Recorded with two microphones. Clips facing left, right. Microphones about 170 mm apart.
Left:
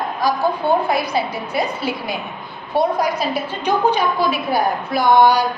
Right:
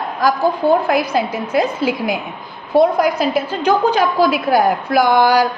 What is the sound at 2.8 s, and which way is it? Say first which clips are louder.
A woman's voice: right 5 dB; 90° right.